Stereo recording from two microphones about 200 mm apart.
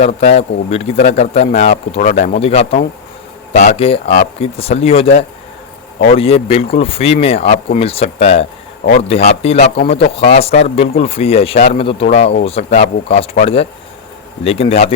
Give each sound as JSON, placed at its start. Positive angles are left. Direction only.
{"t": 0.0, "sound": "speech", "side_deg": 30}
{"t": 6.1, "sound": "speech", "side_deg": 30}